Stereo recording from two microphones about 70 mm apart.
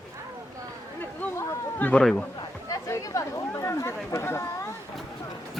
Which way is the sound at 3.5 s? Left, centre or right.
Left.